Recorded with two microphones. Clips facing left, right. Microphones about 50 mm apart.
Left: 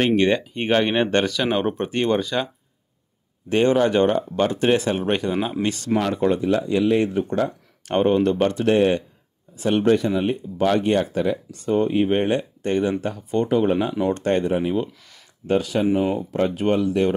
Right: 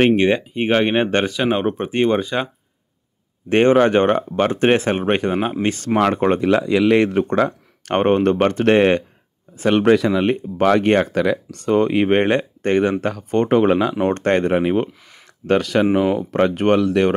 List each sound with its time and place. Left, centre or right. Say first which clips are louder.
0.0 s speech: right 3 dB; right
3.4 s speech: right 4 dB; right
5.9 s speech: right 4 dB; right
6.4 s speech: right 4 dB; right
9.7 s speech: right 4 dB; right
13.9 s speech: right 3 dB; right
14.9 s a sound: right 3 dB; right
15.4 s speech: right 4 dB; right